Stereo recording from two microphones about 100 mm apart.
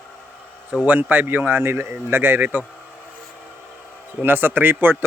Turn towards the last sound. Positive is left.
turn(degrees=-20)  # may be behind; listen again after turning